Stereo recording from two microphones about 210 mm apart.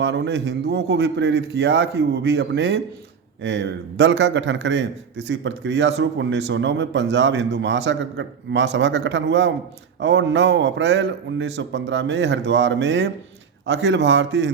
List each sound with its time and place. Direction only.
0.0 s a man's voice: 55° right (ahead or behind)